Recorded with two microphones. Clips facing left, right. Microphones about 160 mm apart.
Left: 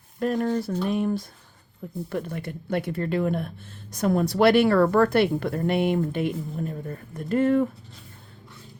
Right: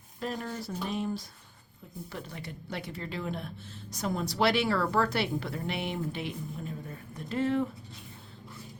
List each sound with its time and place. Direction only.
0.2 s speech: 55° left (ahead or behind)